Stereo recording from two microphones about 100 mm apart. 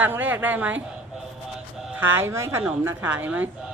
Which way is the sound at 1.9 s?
20° right (ahead or behind).